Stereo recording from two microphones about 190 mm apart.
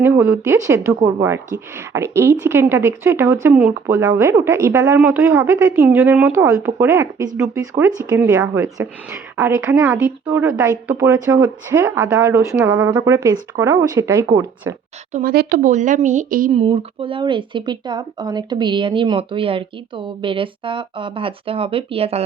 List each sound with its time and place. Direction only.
0.0 s a woman's voice: 10° right (ahead or behind)
15.1 s speech: 50° right (ahead or behind)
16.6 s speech: 30° right (ahead or behind)